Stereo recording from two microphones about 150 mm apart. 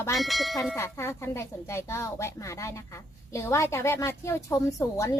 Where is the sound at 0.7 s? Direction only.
20° left (ahead or behind).